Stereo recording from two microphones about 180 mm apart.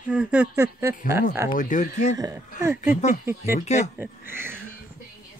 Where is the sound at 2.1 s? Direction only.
20° right (ahead or behind).